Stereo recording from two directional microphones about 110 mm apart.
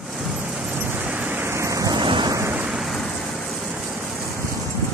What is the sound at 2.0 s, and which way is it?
Vehicle, 45° right (ahead or behind).